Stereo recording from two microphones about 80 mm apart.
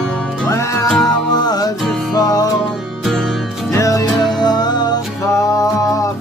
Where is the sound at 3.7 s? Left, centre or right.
Left.